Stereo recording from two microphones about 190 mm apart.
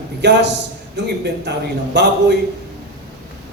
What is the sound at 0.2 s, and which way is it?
A man's voice, 65° right (ahead or behind).